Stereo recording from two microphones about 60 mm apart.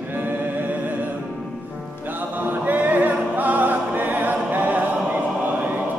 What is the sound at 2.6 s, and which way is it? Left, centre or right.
Music, right.